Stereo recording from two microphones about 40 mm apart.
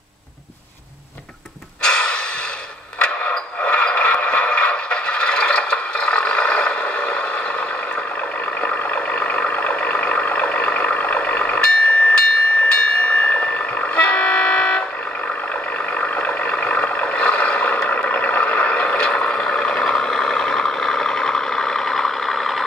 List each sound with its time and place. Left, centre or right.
1.8 s snort: left
3.0 s a sound: left
8.5 s vehicle: left
15.9 s vehicle: left; by 22.7 s centre